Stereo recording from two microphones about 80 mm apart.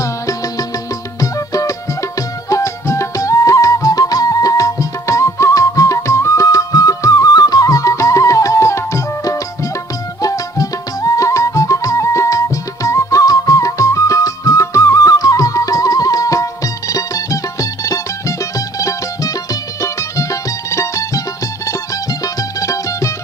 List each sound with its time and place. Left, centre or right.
0.0 s music: left